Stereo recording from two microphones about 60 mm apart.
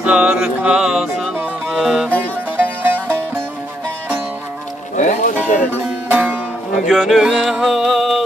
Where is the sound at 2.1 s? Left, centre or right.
Right.